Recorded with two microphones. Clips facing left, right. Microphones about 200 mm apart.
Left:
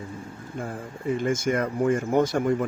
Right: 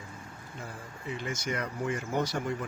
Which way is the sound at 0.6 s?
50° left (ahead or behind).